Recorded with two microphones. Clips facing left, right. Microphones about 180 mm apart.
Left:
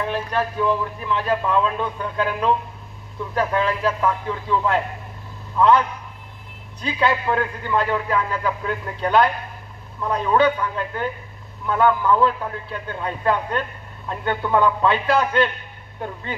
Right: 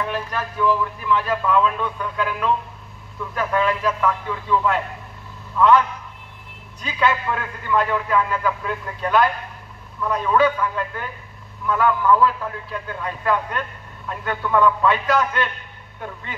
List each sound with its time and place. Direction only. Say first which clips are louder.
0.0 s speech: left 3 dB; 30° left (ahead or behind)
6.8 s a man's voice: even; 30° left (ahead or behind)